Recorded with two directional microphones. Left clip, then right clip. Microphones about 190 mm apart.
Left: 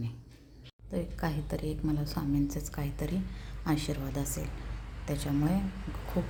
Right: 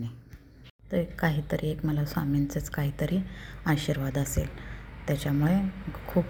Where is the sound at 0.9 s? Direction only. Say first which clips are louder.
Right 7 dB; 15° right (ahead or behind).